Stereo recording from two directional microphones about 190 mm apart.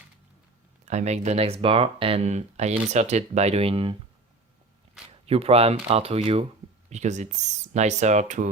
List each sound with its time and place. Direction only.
0.9 s speech: 35° right (ahead or behind)
5.2 s speech: 30° right (ahead or behind)